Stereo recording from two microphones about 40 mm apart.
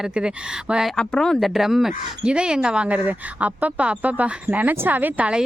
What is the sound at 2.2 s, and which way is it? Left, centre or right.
Speech, right.